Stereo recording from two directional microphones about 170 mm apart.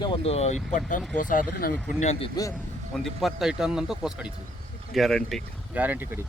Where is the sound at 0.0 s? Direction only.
30° left (ahead or behind).